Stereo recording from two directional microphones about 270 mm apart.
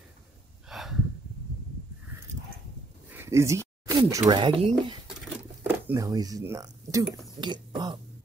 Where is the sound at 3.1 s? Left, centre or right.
Centre.